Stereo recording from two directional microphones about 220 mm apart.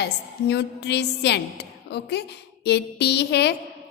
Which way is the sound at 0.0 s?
50° left (ahead or behind).